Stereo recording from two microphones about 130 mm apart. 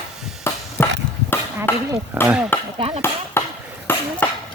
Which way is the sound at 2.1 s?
10° right (ahead or behind).